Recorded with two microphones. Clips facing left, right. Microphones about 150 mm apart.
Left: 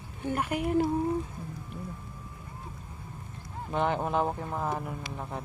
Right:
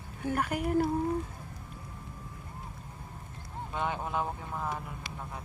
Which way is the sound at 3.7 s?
60° left (ahead or behind).